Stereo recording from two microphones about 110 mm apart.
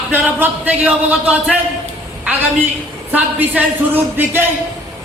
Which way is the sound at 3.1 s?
15° right (ahead or behind).